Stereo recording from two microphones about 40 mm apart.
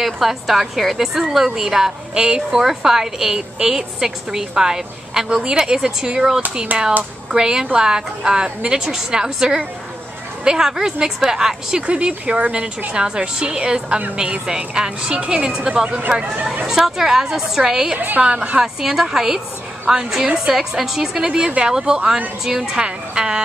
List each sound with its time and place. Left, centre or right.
0.0 s a woman's voice: centre
6.7 s speech: right
7.2 s a woman's voice: centre
11.8 s a woman's voice: right
16.6 s a woman's voice: centre
17.9 s a woman's voice: right
18.2 s a woman's voice: right
18.6 s a woman's voice: centre
22.8 s a woman's voice: right